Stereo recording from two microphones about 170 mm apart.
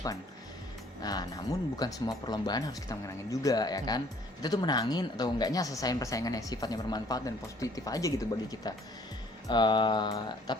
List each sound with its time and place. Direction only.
1.0 s a woman's voice: 25° left (ahead or behind)